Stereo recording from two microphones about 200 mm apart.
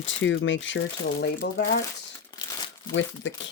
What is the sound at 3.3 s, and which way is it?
Speech, 65° left (ahead or behind).